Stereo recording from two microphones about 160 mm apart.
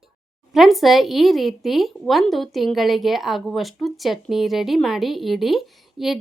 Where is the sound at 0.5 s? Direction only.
Centre (ahead or behind).